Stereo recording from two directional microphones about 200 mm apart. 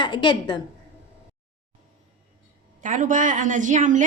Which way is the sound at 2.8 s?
40° right (ahead or behind).